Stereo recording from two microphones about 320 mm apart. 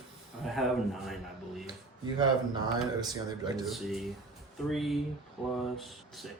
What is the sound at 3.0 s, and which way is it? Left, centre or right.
Speech, centre.